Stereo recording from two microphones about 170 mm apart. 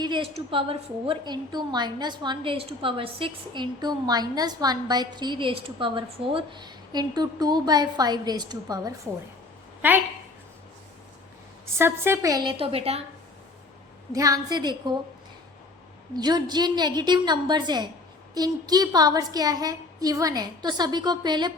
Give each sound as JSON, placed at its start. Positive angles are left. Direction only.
{"t": 0.0, "sound": "a woman's voice", "side_deg": -30}
{"t": 11.8, "sound": "a woman's voice", "side_deg": -15}
{"t": 14.1, "sound": "a woman's voice", "side_deg": -20}
{"t": 16.1, "sound": "a woman's voice", "side_deg": -25}